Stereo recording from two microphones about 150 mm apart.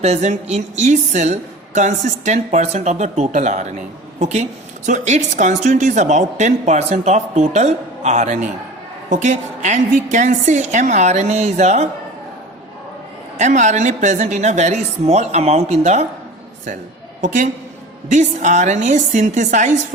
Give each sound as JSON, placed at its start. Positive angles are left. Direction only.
{"t": 0.0, "sound": "a woman's voice", "side_deg": -50}
{"t": 13.3, "sound": "a woman's voice", "side_deg": -55}
{"t": 17.2, "sound": "a woman's voice", "side_deg": -55}